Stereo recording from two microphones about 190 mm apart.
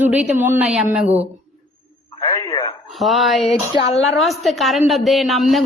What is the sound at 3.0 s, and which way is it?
A woman's voice, centre (ahead or behind).